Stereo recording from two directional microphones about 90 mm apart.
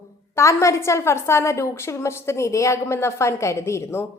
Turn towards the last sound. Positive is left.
turn(degrees=30)  # may be behind; listen again after turning